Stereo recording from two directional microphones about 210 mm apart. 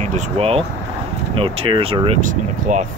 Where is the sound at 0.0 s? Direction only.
30° right (ahead or behind).